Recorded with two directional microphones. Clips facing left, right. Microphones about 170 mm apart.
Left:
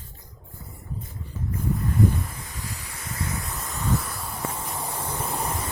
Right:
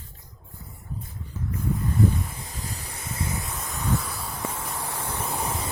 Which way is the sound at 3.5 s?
Centre (ahead or behind).